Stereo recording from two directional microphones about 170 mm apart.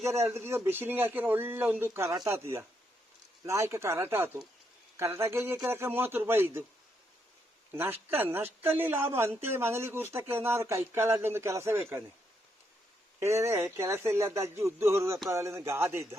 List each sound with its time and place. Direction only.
0.0 s speech: 15° right (ahead or behind)
7.7 s speech: 15° right (ahead or behind)
13.1 s speech: 15° right (ahead or behind)